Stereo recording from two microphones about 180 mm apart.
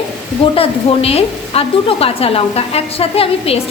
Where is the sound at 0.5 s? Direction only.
30° left (ahead or behind).